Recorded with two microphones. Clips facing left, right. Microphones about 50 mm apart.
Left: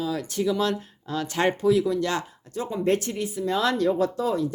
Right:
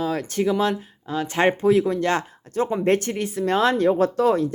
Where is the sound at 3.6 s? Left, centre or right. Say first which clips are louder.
Right 4 dB; right.